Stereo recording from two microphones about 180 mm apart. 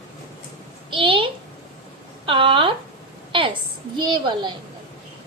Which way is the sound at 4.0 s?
25° right (ahead or behind).